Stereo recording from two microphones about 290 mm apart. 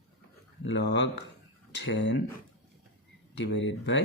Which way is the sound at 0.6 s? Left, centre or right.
Left.